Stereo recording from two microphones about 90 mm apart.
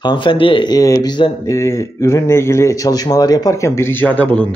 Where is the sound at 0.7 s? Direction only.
45° left (ahead or behind).